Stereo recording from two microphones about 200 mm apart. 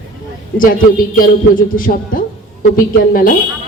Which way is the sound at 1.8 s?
45° left (ahead or behind).